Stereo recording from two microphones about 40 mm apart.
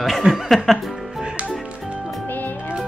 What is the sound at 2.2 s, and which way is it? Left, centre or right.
Music, left.